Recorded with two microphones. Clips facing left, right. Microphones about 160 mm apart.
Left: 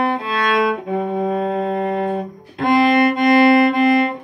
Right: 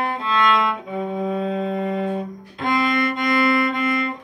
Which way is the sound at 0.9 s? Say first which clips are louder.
Left 4 dB; 50° left (ahead or behind).